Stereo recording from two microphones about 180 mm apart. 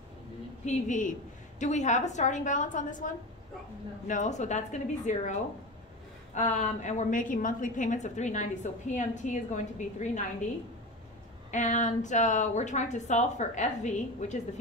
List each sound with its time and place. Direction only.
0.7 s a woman's voice: 45° left (ahead or behind)
4.1 s a woman's voice: 40° left (ahead or behind)
11.5 s a woman's voice: 45° left (ahead or behind)